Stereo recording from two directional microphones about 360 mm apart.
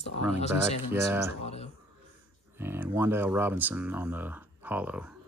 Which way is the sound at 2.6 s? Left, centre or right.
Centre.